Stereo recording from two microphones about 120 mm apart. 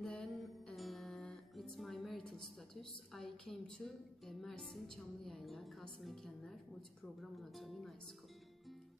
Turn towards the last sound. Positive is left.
turn(degrees=0)  # may be behind; listen again after turning